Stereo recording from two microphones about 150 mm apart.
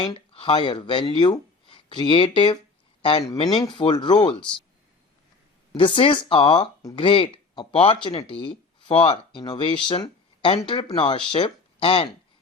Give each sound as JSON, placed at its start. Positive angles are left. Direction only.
{"t": 0.0, "sound": "speech", "side_deg": 35}
{"t": 5.7, "sound": "speech", "side_deg": 35}